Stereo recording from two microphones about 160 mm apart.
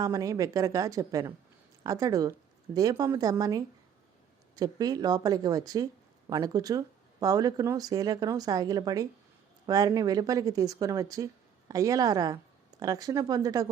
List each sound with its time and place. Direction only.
0.0 s speech: 20° right (ahead or behind)